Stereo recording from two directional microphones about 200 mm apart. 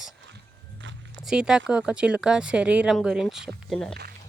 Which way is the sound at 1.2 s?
5° right (ahead or behind).